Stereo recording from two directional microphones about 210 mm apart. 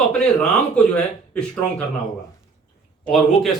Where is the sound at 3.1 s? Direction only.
Centre (ahead or behind).